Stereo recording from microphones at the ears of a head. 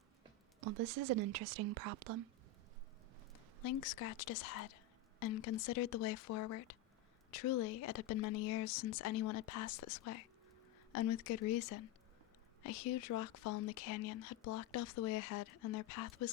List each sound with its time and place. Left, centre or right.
0.6 s speech: right
3.6 s speech: left